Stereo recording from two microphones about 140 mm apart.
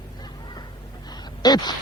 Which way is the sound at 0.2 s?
30° left (ahead or behind).